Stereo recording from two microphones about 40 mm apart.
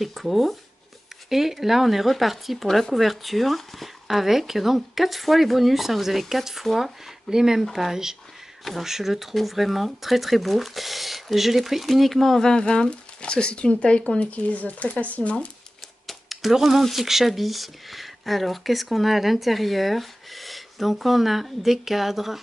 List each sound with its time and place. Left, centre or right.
0.0 s speech: centre
7.2 s speech: centre
12.4 s speech: centre; by 15.3 s left
16.1 s a sound: centre
16.8 s speech: centre